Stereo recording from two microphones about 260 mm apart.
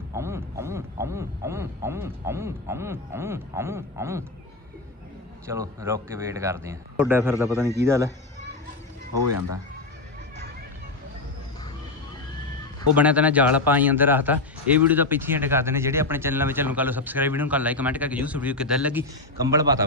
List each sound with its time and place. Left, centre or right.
0.1 s a man's voice: centre
5.5 s a man's voice: centre
13.0 s a man's voice: centre